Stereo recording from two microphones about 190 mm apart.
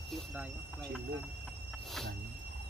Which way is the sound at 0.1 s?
5° right (ahead or behind).